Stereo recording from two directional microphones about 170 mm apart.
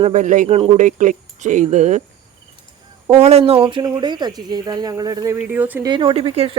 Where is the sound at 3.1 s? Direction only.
40° right (ahead or behind); by 5.3 s 20° right (ahead or behind).